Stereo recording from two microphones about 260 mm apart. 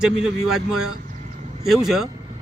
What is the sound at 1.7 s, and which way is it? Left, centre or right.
Speech, centre.